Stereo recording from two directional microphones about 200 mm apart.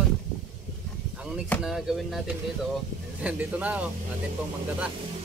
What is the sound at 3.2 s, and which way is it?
Speech, 5° right (ahead or behind).